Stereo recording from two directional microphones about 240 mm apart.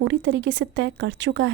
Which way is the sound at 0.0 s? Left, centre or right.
Right.